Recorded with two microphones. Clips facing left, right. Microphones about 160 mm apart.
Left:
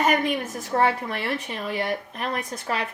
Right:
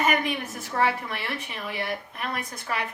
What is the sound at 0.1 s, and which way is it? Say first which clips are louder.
A woman's voice: left 3 dB; 40° left (ahead or behind).